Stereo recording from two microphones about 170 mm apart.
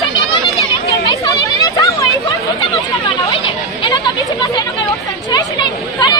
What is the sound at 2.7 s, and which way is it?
Chatter, 30° left (ahead or behind).